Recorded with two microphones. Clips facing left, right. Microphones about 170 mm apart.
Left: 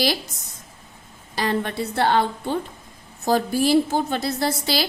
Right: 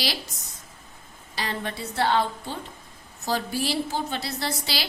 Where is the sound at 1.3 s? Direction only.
50° left (ahead or behind).